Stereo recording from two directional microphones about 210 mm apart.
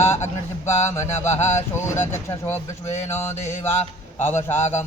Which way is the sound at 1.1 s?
30° left (ahead or behind).